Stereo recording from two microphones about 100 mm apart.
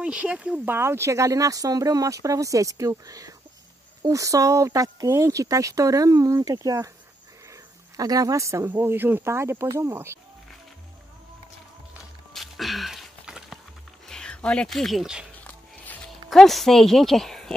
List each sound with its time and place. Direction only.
0.0 s speech: 10° right (ahead or behind)
0.7 s speech: 25° right (ahead or behind)
8.0 s speech: 35° right (ahead or behind)
8.6 s speech: 20° right (ahead or behind)
12.4 s a sound: centre (ahead or behind)
14.0 s speech: 5° left (ahead or behind)
15.3 s music: 15° left (ahead or behind)
16.3 s speech: centre (ahead or behind)